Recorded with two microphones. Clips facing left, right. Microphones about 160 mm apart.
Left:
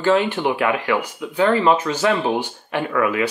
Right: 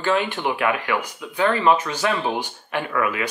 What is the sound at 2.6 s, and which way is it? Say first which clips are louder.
Speech: left 3 dB; 25° left (ahead or behind).